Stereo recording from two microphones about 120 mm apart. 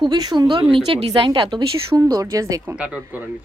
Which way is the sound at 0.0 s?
35° right (ahead or behind).